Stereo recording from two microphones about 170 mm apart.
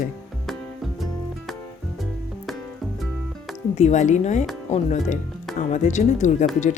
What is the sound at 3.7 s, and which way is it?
Speech, 45° left (ahead or behind).